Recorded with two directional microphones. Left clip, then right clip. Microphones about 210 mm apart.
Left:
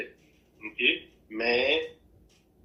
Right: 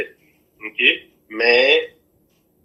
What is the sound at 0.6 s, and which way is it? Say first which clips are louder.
Speech: right 9 dB; 55° right (ahead or behind).